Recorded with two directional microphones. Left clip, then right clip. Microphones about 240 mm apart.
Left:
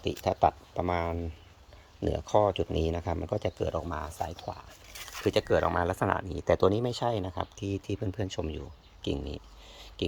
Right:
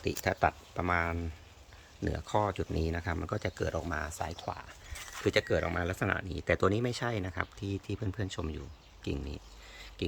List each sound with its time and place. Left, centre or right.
0.0 s speech: right
0.3 s speech: centre
3.3 s speech: right
4.2 s speech: centre
8.4 s a sound: centre